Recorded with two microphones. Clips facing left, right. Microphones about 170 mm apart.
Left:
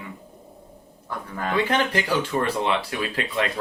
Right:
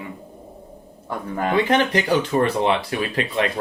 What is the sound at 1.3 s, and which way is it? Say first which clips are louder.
Speech: right 4 dB; 25° right (ahead or behind).